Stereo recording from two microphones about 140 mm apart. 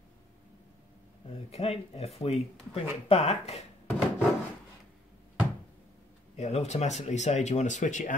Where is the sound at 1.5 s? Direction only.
45° left (ahead or behind).